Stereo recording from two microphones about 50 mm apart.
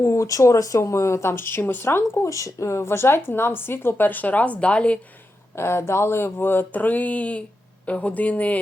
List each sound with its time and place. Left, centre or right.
0.0 s speech: left
2.2 s speech: left
5.5 s speech: left